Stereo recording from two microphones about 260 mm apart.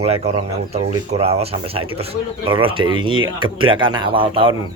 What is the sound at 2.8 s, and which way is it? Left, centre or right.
Speech, right.